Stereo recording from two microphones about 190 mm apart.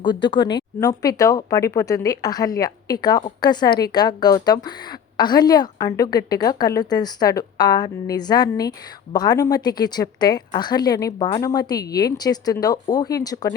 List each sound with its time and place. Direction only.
0.0 s speech: 25° left (ahead or behind)